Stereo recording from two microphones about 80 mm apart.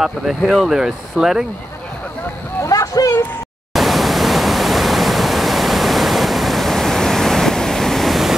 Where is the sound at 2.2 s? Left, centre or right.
Left.